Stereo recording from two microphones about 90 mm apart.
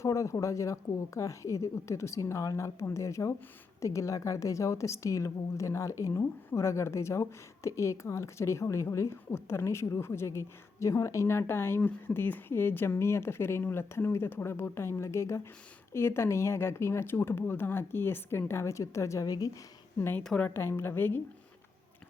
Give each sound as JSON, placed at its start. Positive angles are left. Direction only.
{"t": 0.0, "sound": "a woman's voice", "side_deg": 35}
{"t": 20.0, "sound": "speech", "side_deg": 25}
{"t": 20.2, "sound": "a woman's voice", "side_deg": 10}
{"t": 20.5, "sound": "speech", "side_deg": 30}